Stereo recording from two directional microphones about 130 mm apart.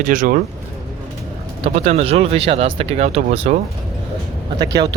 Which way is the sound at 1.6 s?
55° right (ahead or behind).